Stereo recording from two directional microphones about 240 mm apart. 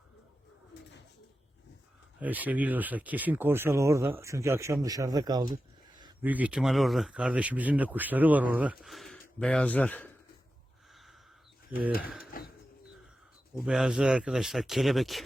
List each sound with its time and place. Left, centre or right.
2.2 s speech: centre
6.2 s speech: centre
8.8 s a sound: centre
9.4 s speech: centre
11.9 s speech: left
12.3 s a sound: left
13.6 s speech: centre